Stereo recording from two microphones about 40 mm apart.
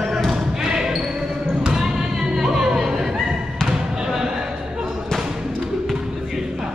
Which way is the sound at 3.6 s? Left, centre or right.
Centre.